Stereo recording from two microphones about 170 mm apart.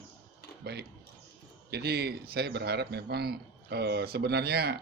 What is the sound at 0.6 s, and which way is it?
Speech, 70° right (ahead or behind).